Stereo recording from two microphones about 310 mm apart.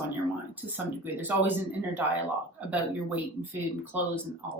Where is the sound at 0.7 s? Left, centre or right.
Centre.